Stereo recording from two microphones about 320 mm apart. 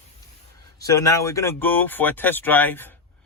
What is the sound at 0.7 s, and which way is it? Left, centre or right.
Speech, centre.